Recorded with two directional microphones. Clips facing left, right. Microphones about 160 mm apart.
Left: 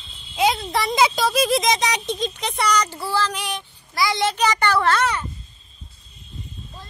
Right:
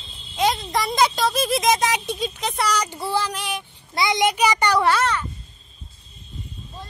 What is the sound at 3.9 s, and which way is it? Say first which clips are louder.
A child's voice: right 1 dB; 20° right (ahead or behind).